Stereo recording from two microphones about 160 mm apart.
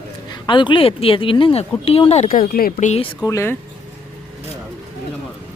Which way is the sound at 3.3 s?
20° left (ahead or behind).